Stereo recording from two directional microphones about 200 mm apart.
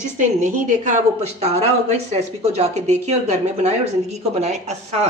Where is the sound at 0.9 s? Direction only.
35° right (ahead or behind).